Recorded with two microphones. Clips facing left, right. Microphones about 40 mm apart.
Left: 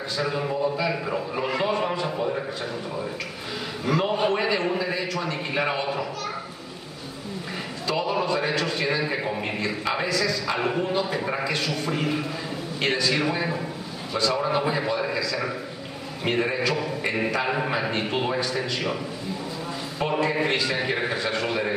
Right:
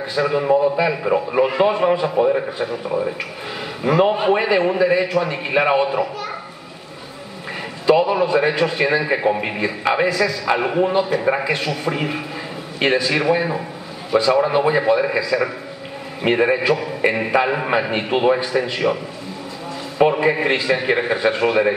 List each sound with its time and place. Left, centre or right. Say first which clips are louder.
0.1 s a man's voice: right 10 dB; right
1.5 s a man's voice: right 8 dB; centre
3.8 s a man's voice: right 7 dB; right
7.8 s a man's voice: right 10 dB; right
20.0 s a man's voice: right 8 dB; right